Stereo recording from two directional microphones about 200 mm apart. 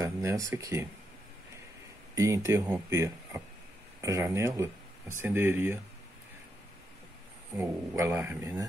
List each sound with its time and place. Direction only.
0.0 s speech: 15° right (ahead or behind)
2.1 s speech: 15° right (ahead or behind)
7.5 s speech: 15° right (ahead or behind)